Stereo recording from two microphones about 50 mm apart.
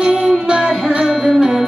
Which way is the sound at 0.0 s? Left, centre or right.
Centre.